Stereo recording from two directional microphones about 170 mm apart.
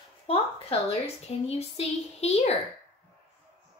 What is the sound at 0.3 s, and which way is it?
A woman's voice, 35° left (ahead or behind).